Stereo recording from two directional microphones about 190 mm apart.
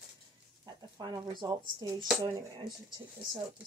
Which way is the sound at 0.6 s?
20° right (ahead or behind).